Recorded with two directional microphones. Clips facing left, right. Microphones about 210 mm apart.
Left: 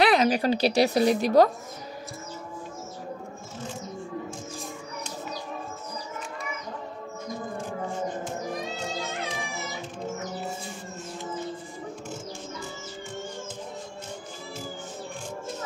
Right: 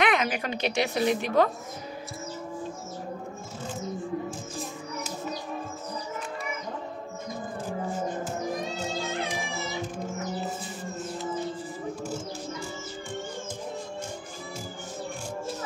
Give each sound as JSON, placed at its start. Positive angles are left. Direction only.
{"t": 0.0, "sound": "a woman's voice", "side_deg": 35}